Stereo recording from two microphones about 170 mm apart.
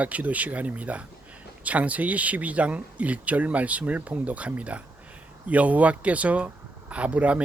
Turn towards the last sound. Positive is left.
turn(degrees=-10)  # may be behind; listen again after turning